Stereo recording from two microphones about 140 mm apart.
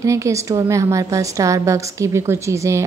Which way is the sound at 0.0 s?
20° right (ahead or behind).